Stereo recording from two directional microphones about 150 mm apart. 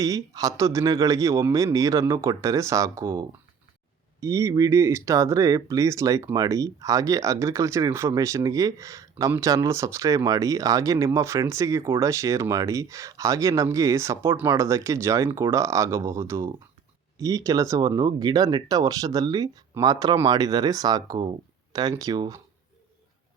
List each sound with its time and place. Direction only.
0.0 s speech: 25° right (ahead or behind)